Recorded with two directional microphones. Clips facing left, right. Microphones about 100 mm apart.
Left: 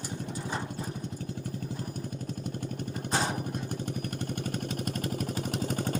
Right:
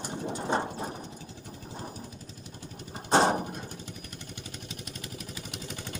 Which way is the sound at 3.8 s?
50° left (ahead or behind).